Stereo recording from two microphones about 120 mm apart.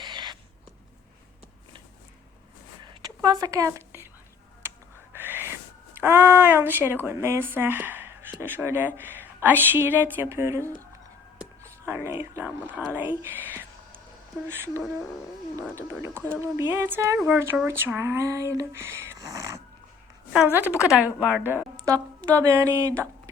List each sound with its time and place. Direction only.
0.0 s a sound: 40° right (ahead or behind)
3.2 s a sound: 30° right (ahead or behind)
5.1 s speech: 15° right (ahead or behind)
11.6 s speech: 20° right (ahead or behind)
20.5 s speech: 15° right (ahead or behind)
21.8 s speech: 25° right (ahead or behind)